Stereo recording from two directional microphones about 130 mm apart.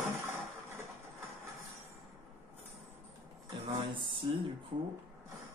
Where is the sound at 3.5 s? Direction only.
40° right (ahead or behind).